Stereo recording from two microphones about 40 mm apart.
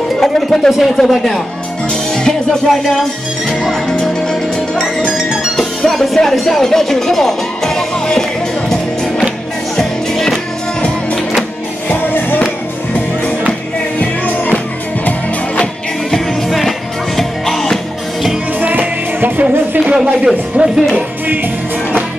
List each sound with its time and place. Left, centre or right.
0.2 s speech: centre
2.2 s music: centre
4.0 s music: centre
5.0 s music: centre
5.6 s speech: centre
9.8 s music: centre
11.9 s music: left
13.9 s music: left
16.1 s music: centre
18.6 s music: right
19.8 s speech: centre